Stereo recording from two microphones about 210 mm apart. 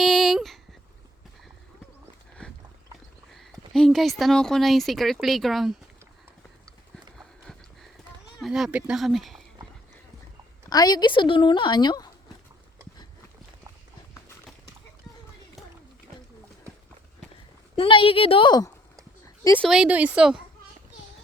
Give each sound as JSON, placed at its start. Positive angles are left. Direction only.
{"t": 0.0, "sound": "a sound", "side_deg": 0}
{"t": 3.7, "sound": "speech", "side_deg": 0}
{"t": 6.9, "sound": "horse", "side_deg": 0}
{"t": 8.4, "sound": "speech", "side_deg": 0}
{"t": 10.7, "sound": "a woman's voice", "side_deg": 20}
{"t": 17.7, "sound": "a woman's voice", "side_deg": 25}
{"t": 19.5, "sound": "speech", "side_deg": 5}
{"t": 19.7, "sound": "speech", "side_deg": -5}